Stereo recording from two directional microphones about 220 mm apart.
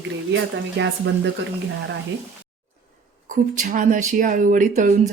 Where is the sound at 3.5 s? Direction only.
35° right (ahead or behind).